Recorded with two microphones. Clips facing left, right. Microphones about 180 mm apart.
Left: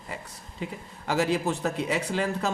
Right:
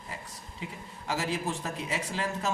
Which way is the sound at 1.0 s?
65° left (ahead or behind).